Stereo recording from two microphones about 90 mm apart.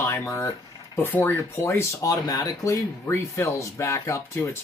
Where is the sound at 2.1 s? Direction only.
45° left (ahead or behind).